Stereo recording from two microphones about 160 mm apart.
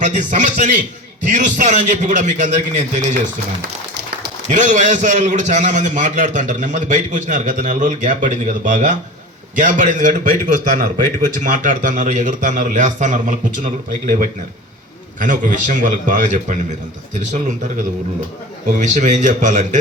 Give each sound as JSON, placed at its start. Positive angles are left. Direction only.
{"t": 0.0, "sound": "a man's voice", "side_deg": -50}
{"t": 4.4, "sound": "a man's voice", "side_deg": -50}